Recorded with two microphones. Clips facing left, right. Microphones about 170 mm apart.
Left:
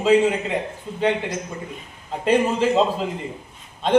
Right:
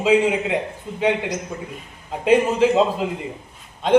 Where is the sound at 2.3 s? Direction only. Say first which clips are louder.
Right 3 dB; 10° right (ahead or behind).